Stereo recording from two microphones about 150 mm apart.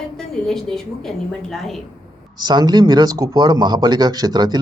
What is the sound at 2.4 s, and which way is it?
A man's voice, 30° right (ahead or behind).